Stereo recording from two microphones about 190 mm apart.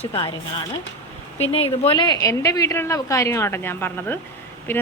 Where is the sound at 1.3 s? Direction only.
30° left (ahead or behind); by 4.8 s 10° left (ahead or behind).